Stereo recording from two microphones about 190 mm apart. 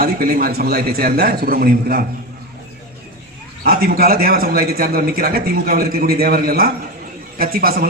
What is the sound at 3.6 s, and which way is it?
A man's voice, 50° right (ahead or behind).